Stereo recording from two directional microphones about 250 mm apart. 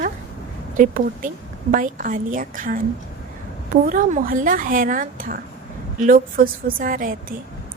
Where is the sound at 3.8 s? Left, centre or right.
Right.